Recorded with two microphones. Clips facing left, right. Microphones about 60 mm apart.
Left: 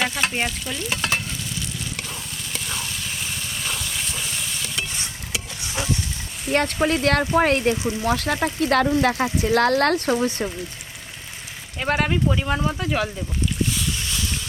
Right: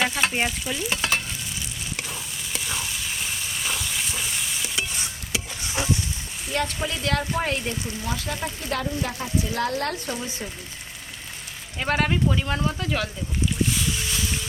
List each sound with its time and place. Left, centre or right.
0.0 s stir: centre
2.0 s sizzle: centre
6.5 s speech: left
11.8 s speech: centre
13.7 s boat: centre